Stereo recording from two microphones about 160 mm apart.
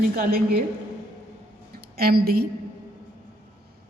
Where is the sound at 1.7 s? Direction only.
75° right (ahead or behind).